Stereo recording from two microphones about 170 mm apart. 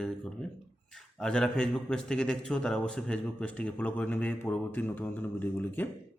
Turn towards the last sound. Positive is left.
turn(degrees=10)  # may be behind; listen again after turning